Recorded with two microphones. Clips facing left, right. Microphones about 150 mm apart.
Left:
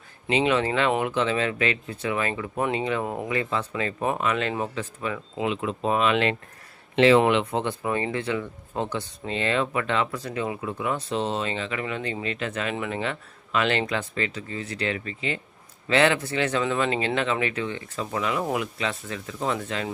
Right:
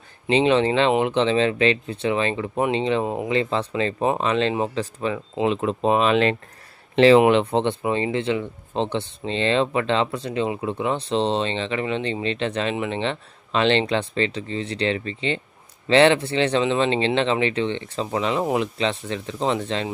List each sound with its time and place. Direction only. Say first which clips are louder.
0.3 s speech: right 5 dB; 30° right (ahead or behind)